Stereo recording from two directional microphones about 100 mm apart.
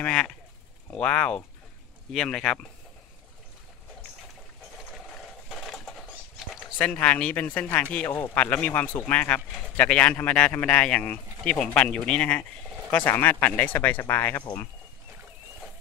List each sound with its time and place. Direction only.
0.0 s speech: 10° left (ahead or behind)
5.5 s a sound: centre (ahead or behind)
6.8 s speech: 10° left (ahead or behind)